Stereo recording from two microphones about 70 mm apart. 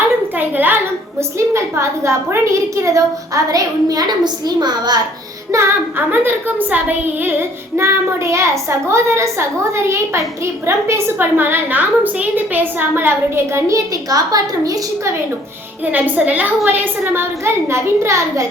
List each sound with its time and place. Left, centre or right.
0.3 s a sound: right
1.4 s a woman's voice: right
5.5 s a woman's voice: right
6.1 s a child's voice: right
15.9 s a child's voice: right